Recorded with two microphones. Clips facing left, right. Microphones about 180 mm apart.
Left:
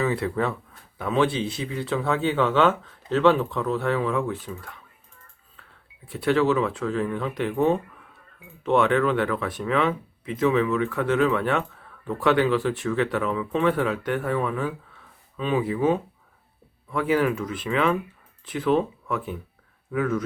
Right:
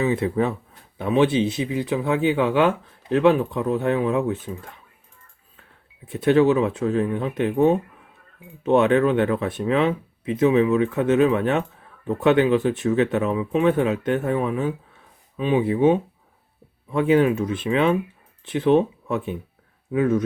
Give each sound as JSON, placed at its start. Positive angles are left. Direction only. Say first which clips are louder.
{"t": 0.0, "sound": "speech", "louder": "right 3 dB", "side_deg": -20}
{"t": 6.1, "sound": "speech", "louder": "right 4 dB", "side_deg": -20}